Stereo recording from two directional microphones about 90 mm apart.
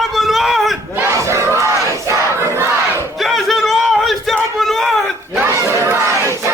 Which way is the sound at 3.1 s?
Centre (ahead or behind).